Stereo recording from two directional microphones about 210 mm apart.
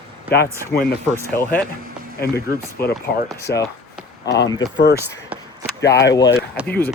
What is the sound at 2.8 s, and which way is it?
Speech, 50° left (ahead or behind).